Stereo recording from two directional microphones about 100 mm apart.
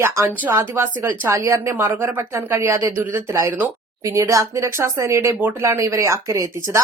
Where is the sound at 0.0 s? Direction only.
30° right (ahead or behind).